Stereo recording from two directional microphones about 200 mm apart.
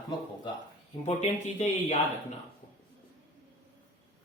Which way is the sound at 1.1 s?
35° left (ahead or behind).